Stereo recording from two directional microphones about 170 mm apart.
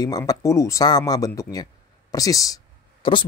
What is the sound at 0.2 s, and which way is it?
Speech, 20° left (ahead or behind).